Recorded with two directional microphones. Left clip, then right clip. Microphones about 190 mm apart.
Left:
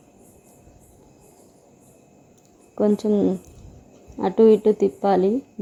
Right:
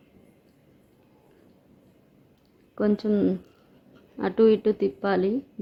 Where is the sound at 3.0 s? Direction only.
5° left (ahead or behind).